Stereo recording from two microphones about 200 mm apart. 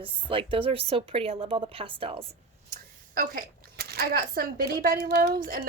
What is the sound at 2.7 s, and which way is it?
Speech, 45° right (ahead or behind).